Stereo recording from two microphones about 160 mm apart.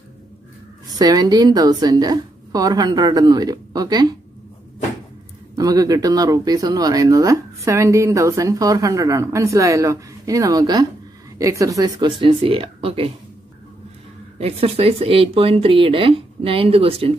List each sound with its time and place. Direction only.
0.8 s speech: 25° right (ahead or behind)
5.6 s speech: 20° right (ahead or behind)
14.4 s speech: 40° right (ahead or behind)